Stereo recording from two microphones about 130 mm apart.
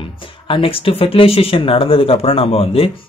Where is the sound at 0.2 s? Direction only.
45° left (ahead or behind).